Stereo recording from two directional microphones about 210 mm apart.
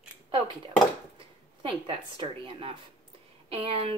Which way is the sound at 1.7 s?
25° right (ahead or behind).